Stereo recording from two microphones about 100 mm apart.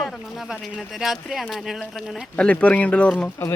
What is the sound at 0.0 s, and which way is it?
Speech, centre (ahead or behind).